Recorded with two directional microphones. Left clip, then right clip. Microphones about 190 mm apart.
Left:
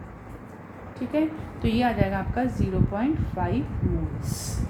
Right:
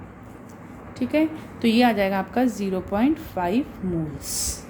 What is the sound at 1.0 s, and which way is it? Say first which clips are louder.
A woman's voice: right 4 dB; 55° right (ahead or behind).